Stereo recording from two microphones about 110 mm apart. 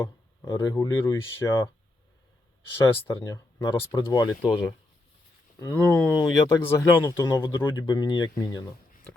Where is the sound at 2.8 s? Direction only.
25° left (ahead or behind).